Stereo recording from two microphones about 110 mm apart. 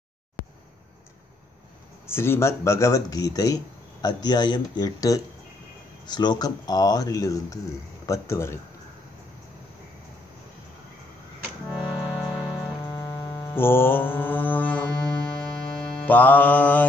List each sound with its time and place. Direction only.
2.0 s a man's voice: 20° left (ahead or behind)
11.8 s music: 45° left (ahead or behind)
12.8 s music: 35° left (ahead or behind)
13.5 s mantra: 20° left (ahead or behind)